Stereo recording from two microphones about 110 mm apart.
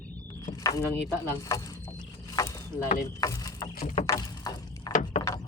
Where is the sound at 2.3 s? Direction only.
35° left (ahead or behind).